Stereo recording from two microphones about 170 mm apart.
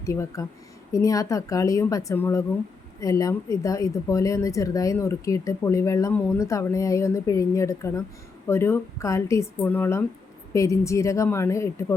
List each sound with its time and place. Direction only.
0.0 s a woman's voice: 20° left (ahead or behind)